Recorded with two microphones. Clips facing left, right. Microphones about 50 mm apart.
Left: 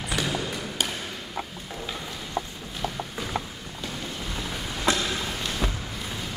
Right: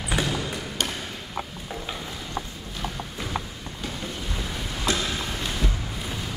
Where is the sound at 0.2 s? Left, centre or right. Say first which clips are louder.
Right 2 dB; centre.